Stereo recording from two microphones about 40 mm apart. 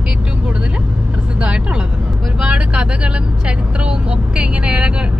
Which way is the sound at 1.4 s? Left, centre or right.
Right.